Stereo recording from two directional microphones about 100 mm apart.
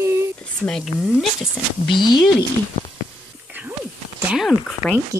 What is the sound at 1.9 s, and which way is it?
Speech, 50° left (ahead or behind).